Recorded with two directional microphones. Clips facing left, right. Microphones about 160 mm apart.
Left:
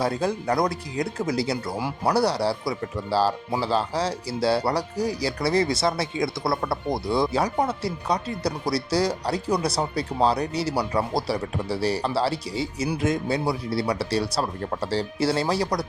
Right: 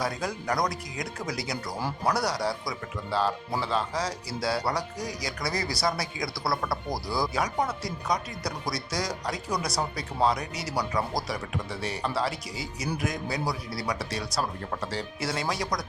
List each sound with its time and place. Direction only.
0.0 s speech: 30° left (ahead or behind)